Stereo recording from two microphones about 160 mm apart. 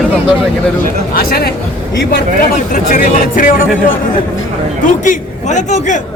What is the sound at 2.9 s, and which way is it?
Speech, 55° left (ahead or behind).